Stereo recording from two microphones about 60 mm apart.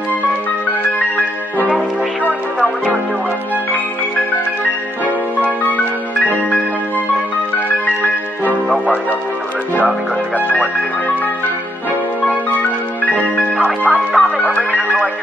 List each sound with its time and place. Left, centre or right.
13.0 s music: left